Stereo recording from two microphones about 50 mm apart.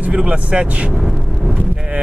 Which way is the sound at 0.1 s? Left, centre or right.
Right.